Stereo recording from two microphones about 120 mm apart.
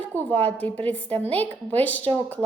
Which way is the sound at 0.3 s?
10° left (ahead or behind).